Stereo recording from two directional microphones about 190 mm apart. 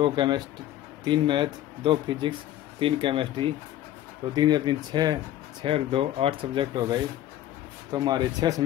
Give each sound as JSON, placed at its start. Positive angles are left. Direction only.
{"t": 0.0, "sound": "speech", "side_deg": -25}